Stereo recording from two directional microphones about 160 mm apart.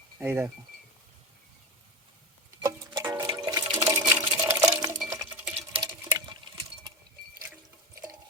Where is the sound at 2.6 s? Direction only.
20° right (ahead or behind).